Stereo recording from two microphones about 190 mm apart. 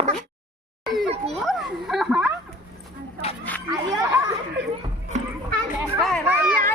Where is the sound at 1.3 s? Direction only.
Centre (ahead or behind).